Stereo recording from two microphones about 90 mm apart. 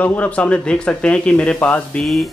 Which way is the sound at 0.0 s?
15° left (ahead or behind).